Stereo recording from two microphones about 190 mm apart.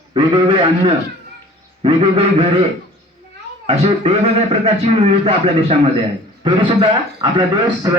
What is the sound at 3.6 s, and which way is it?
A man's voice, 35° right (ahead or behind).